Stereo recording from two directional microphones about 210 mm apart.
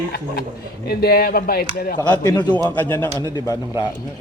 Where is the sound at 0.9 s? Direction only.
45° left (ahead or behind).